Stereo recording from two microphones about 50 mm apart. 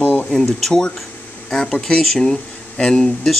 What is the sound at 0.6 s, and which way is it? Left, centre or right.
Speech, centre.